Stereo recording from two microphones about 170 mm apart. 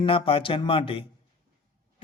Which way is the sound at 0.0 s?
30° left (ahead or behind).